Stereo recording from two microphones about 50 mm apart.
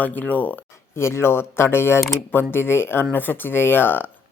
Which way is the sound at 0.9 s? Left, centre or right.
Left.